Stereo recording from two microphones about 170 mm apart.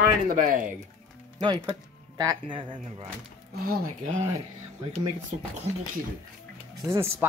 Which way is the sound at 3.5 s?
60° right (ahead or behind).